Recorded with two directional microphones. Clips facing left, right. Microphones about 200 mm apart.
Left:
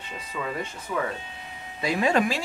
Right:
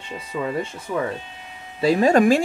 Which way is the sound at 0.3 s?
30° right (ahead or behind).